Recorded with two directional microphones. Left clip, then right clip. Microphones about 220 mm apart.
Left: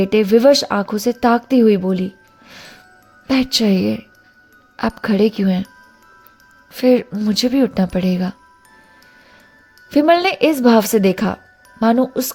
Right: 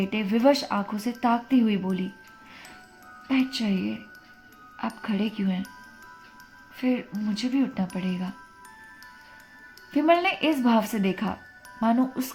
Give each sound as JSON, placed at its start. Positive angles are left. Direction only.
{"t": 0.0, "sound": "speech", "side_deg": 50}
{"t": 2.5, "sound": "music", "side_deg": 45}
{"t": 3.2, "sound": "speech", "side_deg": 55}
{"t": 6.7, "sound": "speech", "side_deg": 55}
{"t": 9.9, "sound": "speech", "side_deg": 50}